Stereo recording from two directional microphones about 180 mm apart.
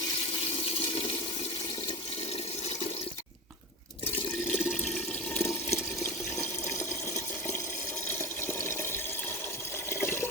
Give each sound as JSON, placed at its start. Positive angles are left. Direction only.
{"t": 4.5, "sound": "water", "side_deg": 5}
{"t": 8.4, "sound": "water", "side_deg": 10}
{"t": 9.9, "sound": "toilet flush", "side_deg": 15}